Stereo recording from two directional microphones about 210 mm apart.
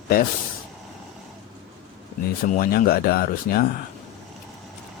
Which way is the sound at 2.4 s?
40° left (ahead or behind).